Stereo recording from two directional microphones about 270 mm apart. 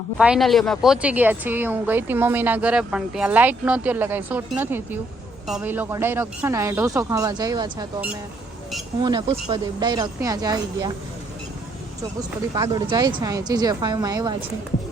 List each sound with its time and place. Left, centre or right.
0.2 s a woman's voice: centre
12.5 s a woman's voice: centre